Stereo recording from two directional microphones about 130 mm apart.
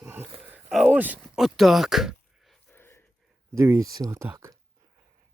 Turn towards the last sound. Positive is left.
turn(degrees=-20)  # may be behind; listen again after turning